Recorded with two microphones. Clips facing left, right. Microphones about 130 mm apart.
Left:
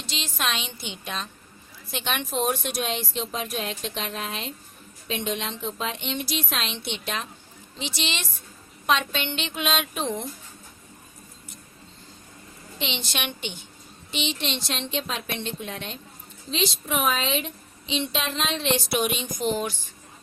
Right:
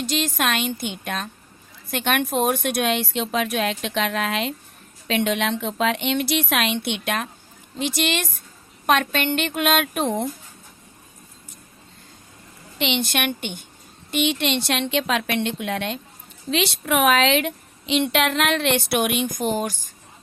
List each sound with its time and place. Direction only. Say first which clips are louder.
0.0 s a woman's voice: right 7 dB; 50° right (ahead or behind)
12.8 s a woman's voice: right 8 dB; 60° right (ahead or behind); by 19.9 s 40° right (ahead or behind)